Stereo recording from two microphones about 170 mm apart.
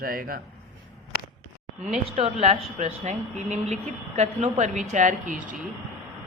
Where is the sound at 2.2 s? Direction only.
40° right (ahead or behind).